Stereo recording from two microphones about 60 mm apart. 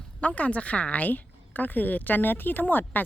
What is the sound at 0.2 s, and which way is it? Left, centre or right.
A woman's voice, left.